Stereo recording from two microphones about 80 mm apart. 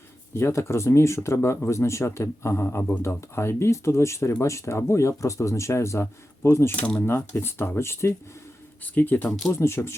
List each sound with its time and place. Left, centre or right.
0.3 s speech: left
2.6 s speech: left
3.0 s speech: left
8.8 s speech: left